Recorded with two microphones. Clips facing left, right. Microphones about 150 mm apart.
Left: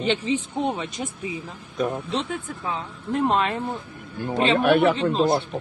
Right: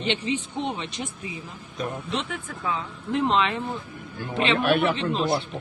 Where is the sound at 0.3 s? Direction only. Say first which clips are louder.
Left 3 dB; 45° left (ahead or behind).